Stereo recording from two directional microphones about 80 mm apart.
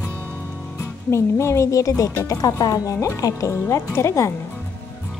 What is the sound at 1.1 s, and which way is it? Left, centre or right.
Speech, left.